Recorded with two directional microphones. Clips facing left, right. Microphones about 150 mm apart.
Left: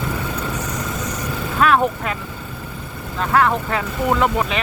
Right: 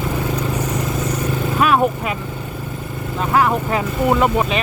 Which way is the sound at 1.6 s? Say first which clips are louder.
Even; 10° right (ahead or behind).